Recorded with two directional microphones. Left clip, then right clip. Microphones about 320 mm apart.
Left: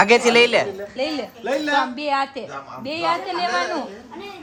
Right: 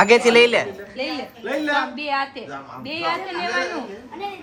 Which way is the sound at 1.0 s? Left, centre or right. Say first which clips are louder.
Left 2 dB; left.